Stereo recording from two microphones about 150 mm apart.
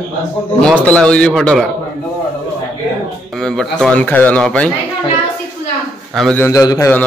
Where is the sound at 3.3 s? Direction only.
5° left (ahead or behind).